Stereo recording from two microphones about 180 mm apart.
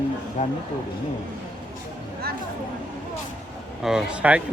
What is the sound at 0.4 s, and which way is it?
Speech, 35° left (ahead or behind).